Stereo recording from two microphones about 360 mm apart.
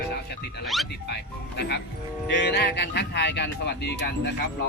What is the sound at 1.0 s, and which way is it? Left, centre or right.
Speech, left.